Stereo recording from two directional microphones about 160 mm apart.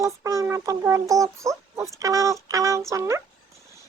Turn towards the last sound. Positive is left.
turn(degrees=-15)  # may be behind; listen again after turning